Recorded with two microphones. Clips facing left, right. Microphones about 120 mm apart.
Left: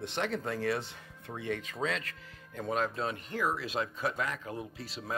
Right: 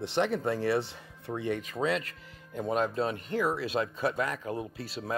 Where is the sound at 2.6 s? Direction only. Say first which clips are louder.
Right 4 dB; 30° right (ahead or behind).